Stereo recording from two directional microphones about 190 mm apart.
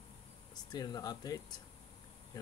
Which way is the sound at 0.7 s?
20° left (ahead or behind).